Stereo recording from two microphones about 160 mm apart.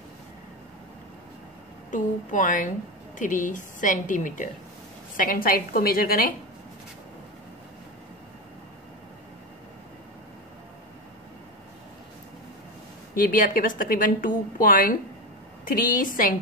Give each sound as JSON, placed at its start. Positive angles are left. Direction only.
{"t": 1.9, "sound": "a woman's voice", "side_deg": 55}
{"t": 13.1, "sound": "a woman's voice", "side_deg": 60}